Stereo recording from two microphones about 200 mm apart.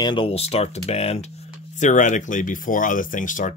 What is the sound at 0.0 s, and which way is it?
Speech, 25° left (ahead or behind).